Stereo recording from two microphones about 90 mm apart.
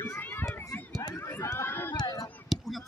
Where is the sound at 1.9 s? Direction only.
45° left (ahead or behind).